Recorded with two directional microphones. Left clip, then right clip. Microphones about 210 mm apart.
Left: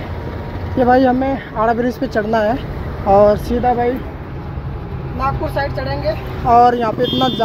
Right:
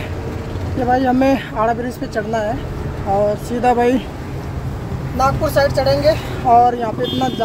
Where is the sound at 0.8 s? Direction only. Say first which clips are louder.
Left 4 dB; 15° left (ahead or behind).